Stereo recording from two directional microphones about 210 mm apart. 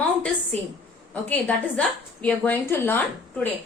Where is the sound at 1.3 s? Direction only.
5° left (ahead or behind).